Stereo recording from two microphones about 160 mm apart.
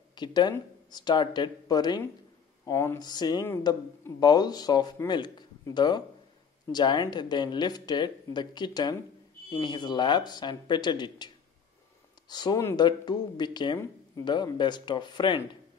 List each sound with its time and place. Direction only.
0.1 s speech: 25° left (ahead or behind)